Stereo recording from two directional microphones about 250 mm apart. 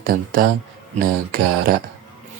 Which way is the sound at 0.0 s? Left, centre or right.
Right.